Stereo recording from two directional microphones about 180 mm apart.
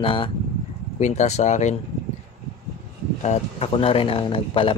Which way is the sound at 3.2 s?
35° left (ahead or behind).